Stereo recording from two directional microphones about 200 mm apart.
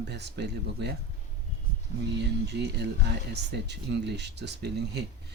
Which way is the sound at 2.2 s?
55° right (ahead or behind).